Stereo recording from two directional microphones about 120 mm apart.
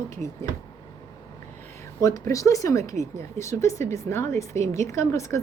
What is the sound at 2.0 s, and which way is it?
A woman's voice, 25° left (ahead or behind).